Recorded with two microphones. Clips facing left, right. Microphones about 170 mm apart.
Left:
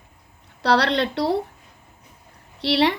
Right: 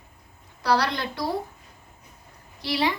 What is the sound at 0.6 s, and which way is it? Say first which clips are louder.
Speech: left 4 dB; 70° left (ahead or behind).